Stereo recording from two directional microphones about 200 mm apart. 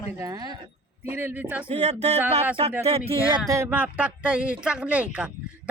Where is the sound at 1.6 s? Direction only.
35° right (ahead or behind).